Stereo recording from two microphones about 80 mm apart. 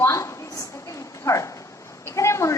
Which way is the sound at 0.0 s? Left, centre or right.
Left.